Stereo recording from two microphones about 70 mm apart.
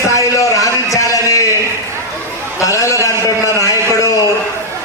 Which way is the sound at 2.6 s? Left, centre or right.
Left.